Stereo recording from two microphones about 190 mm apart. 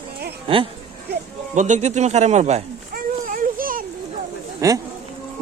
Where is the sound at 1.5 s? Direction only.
40° right (ahead or behind).